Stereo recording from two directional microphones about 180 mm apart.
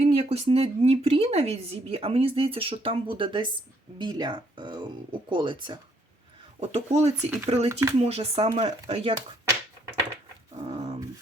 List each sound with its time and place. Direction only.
0.0 s speech: 35° right (ahead or behind)
6.6 s speech: 35° right (ahead or behind)
7.7 s speech: 15° right (ahead or behind)
8.0 s speech: 35° right (ahead or behind)
10.6 s dog: 35° right (ahead or behind)